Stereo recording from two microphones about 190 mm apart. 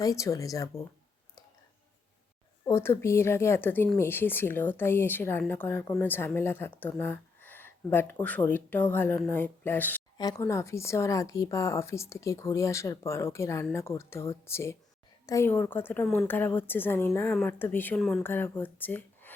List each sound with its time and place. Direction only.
0.0 s a woman's voice: 15° left (ahead or behind)
2.6 s a woman's voice: 15° left (ahead or behind)